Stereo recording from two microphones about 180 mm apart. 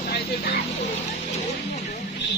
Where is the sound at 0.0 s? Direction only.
60° left (ahead or behind).